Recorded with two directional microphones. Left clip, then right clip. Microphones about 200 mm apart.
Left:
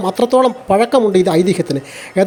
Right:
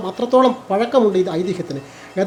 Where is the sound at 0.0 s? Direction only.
40° left (ahead or behind).